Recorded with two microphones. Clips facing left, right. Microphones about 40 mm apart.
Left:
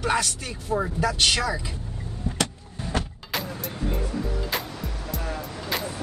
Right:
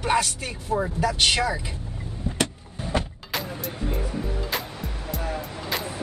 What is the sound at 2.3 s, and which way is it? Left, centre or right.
Vehicle, centre.